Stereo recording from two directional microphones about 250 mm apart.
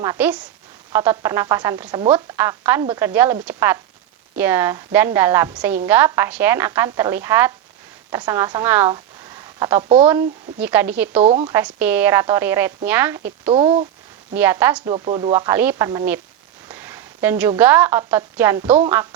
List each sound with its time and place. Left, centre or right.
0.0 s a woman's voice: centre
2.3 s a woman's voice: centre
11.2 s speech: right
11.5 s a woman's voice: centre
13.5 s speech: right
14.3 s a woman's voice: centre
14.8 s a woman's voice: right
16.6 s a sound: centre
17.6 s a woman's voice: centre